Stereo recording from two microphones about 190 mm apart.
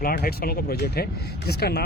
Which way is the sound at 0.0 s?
50° left (ahead or behind).